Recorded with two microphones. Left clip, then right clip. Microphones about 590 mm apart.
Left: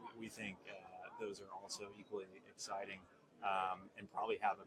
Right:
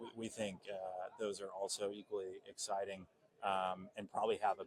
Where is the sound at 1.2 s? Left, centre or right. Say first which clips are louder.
Right 7 dB; right.